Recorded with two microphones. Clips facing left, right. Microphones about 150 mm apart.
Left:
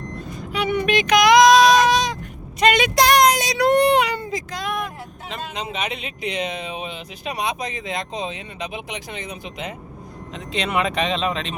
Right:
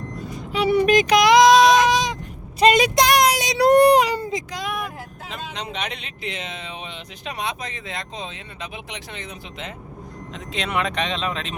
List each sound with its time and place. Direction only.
0.5 s a sound: 35° right (ahead or behind); by 2.1 s 15° right (ahead or behind)
2.6 s a sound: 35° right (ahead or behind)
2.9 s child singing: 15° right (ahead or behind)
3.6 s baby cry: 45° right (ahead or behind)
4.3 s speech: 15° right (ahead or behind)
5.3 s speech: 5° left (ahead or behind)
10.3 s speech: centre (ahead or behind)